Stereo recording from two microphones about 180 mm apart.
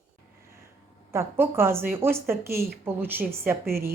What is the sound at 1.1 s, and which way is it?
A woman's voice, 15° right (ahead or behind).